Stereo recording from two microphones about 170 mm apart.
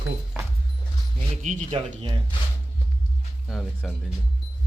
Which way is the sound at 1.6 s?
35° right (ahead or behind).